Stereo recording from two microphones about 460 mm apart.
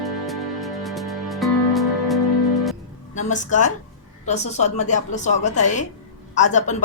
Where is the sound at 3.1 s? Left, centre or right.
Centre.